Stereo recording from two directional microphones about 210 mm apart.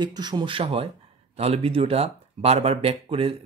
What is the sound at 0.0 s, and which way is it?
Speech, 20° right (ahead or behind).